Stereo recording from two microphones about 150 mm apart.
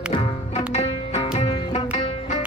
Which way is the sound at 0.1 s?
35° left (ahead or behind).